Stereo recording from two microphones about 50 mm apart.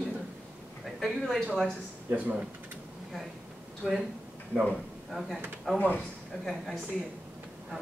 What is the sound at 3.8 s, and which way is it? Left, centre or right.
A man's voice, centre.